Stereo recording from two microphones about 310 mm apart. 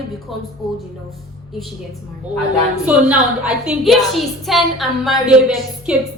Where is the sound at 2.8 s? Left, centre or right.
Centre.